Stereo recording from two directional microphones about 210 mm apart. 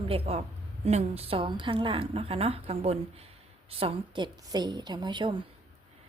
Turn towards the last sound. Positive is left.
turn(degrees=-20)  # may be behind; listen again after turning